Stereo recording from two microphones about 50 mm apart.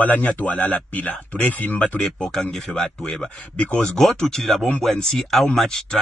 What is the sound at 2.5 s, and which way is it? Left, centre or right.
Speech, centre.